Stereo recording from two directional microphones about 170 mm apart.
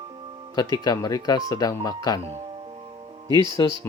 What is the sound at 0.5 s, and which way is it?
Speech, 20° left (ahead or behind).